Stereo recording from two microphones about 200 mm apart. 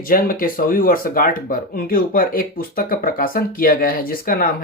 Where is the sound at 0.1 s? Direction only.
45° left (ahead or behind).